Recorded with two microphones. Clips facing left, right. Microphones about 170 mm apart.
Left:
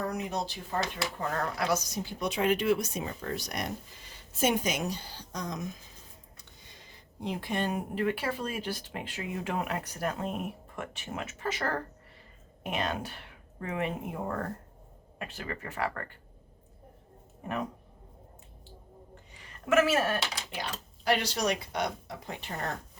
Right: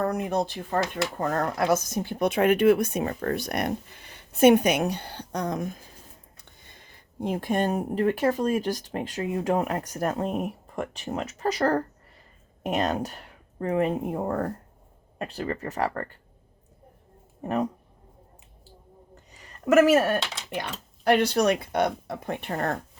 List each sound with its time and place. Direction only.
0.0 s speech: 55° right (ahead or behind)
19.3 s a sound: 40° right (ahead or behind)
20.6 s speech: 55° right (ahead or behind)